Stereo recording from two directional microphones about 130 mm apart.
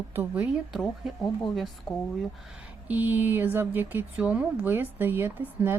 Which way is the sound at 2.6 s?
10° right (ahead or behind).